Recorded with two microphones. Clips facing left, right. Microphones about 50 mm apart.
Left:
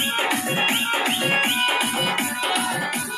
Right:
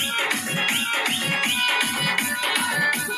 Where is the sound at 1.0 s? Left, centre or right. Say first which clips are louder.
Left 3 dB; left.